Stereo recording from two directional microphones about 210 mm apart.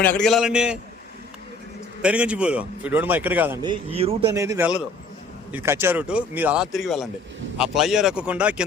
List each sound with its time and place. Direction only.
0.0 s speech: 5° left (ahead or behind)
2.0 s a man's voice: 5° right (ahead or behind)
3.6 s speech: 25° right (ahead or behind)
4.3 s a man's voice: 15° right (ahead or behind)